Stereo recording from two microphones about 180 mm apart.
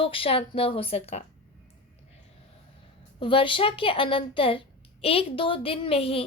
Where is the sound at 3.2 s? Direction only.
30° left (ahead or behind).